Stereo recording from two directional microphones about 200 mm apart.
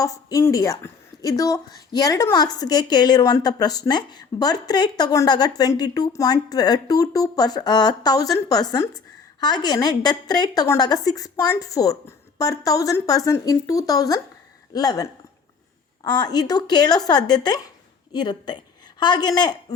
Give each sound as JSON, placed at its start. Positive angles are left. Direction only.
{"t": 0.0, "sound": "a woman's voice", "side_deg": 15}